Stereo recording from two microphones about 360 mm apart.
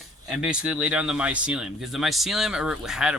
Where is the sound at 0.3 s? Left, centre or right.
Centre.